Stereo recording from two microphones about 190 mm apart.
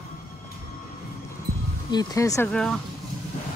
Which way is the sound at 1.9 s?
20° left (ahead or behind).